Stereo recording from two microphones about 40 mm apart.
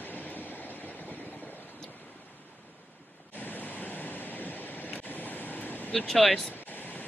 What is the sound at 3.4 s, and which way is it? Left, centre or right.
Waves, left.